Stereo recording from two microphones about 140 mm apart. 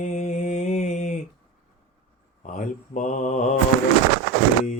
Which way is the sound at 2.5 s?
65° left (ahead or behind).